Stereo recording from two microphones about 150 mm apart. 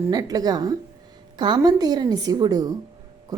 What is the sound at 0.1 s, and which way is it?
A woman's voice, 25° right (ahead or behind).